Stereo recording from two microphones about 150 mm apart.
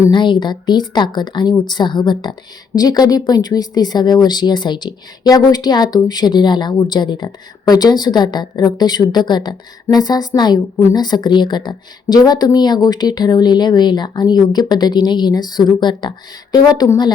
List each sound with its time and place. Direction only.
0.1 s a woman's voice: 30° left (ahead or behind)